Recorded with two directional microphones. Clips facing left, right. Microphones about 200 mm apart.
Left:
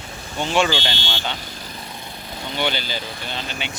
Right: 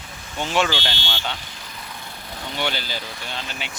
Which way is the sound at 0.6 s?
15° left (ahead or behind).